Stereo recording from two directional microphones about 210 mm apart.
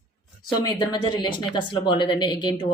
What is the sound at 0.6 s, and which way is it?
Speech, 20° left (ahead or behind).